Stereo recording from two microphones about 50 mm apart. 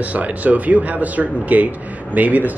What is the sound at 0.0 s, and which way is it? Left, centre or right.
A man's voice, right.